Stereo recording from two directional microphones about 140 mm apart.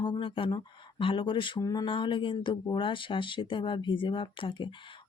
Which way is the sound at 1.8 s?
35° left (ahead or behind).